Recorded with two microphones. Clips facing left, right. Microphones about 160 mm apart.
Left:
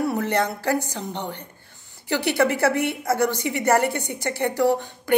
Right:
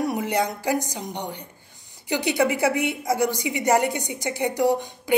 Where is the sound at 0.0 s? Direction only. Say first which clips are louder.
Left 1 dB; 15° right (ahead or behind).